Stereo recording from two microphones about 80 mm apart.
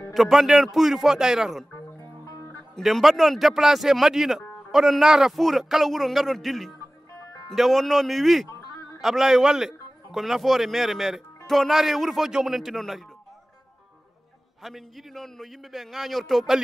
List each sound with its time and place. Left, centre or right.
0.1 s a man's voice: centre
2.0 s music: left
2.7 s a man's voice: centre
8.5 s music: left
9.0 s a man's voice: centre
14.6 s a man's voice: centre